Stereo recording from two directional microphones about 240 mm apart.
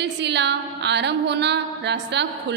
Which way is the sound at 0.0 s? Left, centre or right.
Right.